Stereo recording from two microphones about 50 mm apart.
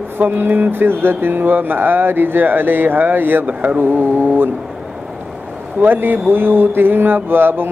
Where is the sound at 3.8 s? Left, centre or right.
Right.